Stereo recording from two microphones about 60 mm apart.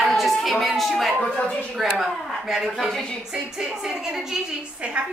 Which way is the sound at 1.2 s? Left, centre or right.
Centre.